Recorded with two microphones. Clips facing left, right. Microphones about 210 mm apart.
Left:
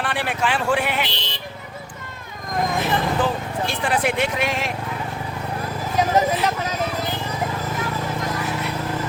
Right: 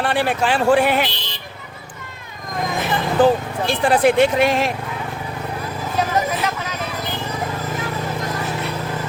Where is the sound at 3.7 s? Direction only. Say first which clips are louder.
Right 8 dB; 30° right (ahead or behind).